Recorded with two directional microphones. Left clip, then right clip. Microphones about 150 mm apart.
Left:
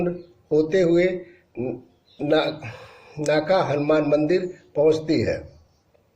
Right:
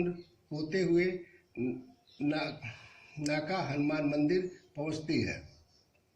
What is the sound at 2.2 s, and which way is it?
A man's voice, 40° left (ahead or behind).